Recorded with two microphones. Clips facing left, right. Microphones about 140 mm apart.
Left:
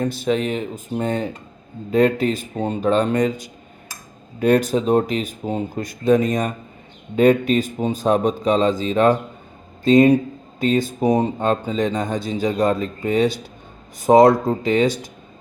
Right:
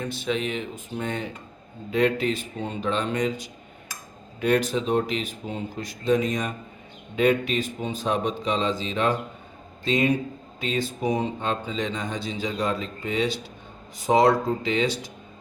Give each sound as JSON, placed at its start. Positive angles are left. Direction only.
{"t": 0.0, "sound": "speech", "side_deg": 40}